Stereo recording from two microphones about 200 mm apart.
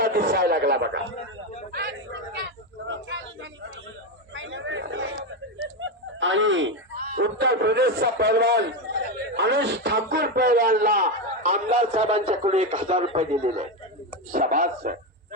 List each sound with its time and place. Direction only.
0.0 s a man's voice: 45° right (ahead or behind)
1.7 s a sound: 55° right (ahead or behind)
4.4 s a sound: 70° right (ahead or behind)
5.8 s chicken: 70° right (ahead or behind)
7.2 s a man's voice: 55° right (ahead or behind); by 11.9 s 40° right (ahead or behind)
11.9 s a man's voice: 30° right (ahead or behind)
14.3 s a man's voice: 45° right (ahead or behind)